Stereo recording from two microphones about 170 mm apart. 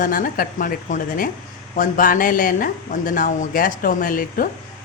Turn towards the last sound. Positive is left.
turn(degrees=55)  # may be behind; listen again after turning